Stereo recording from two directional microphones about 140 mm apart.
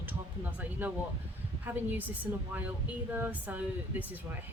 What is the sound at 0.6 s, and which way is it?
Speech, 10° right (ahead or behind).